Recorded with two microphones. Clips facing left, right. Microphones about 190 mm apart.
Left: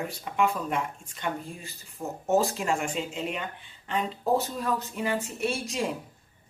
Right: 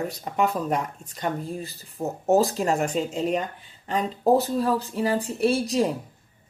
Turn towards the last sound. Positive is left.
turn(degrees=-35)  # may be behind; listen again after turning